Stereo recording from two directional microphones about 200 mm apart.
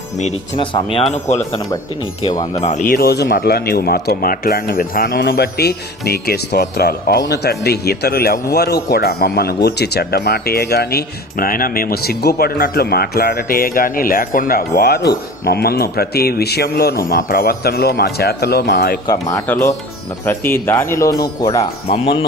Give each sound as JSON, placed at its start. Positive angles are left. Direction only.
{"t": 0.2, "sound": "speech", "side_deg": 30}
{"t": 2.9, "sound": "speech", "side_deg": 50}
{"t": 19.0, "sound": "speech", "side_deg": 15}
{"t": 21.6, "sound": "speech", "side_deg": 30}